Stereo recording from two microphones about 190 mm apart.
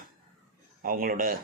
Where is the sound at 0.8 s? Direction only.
50° right (ahead or behind).